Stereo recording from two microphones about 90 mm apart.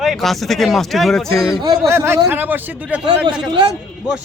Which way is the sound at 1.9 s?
25° right (ahead or behind).